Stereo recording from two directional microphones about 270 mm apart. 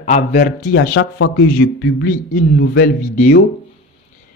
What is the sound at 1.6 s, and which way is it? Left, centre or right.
Speech, left.